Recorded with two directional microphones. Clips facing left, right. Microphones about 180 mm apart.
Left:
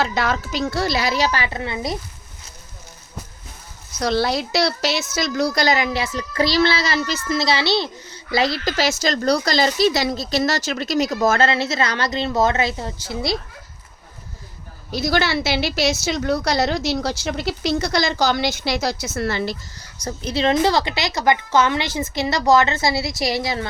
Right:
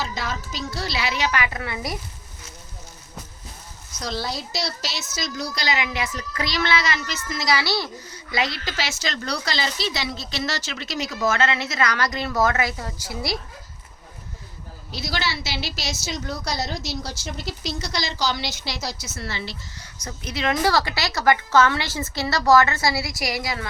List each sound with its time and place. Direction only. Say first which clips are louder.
0.0 s a woman's voice: left 8 dB; 65° left (ahead or behind); by 2.0 s 25° left (ahead or behind)
4.0 s a woman's voice: left 9 dB; 70° left (ahead or behind); by 13.4 s 25° left (ahead or behind)
14.8 s a woman's voice: left 8 dB; 50° left (ahead or behind); by 23.6 s 25° left (ahead or behind)